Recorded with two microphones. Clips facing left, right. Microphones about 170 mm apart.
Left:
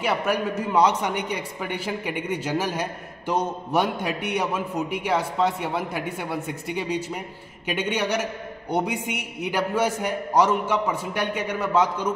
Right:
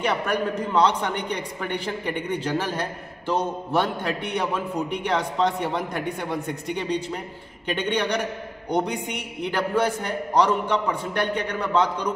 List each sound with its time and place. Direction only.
0.0 s a man's voice: 5° left (ahead or behind)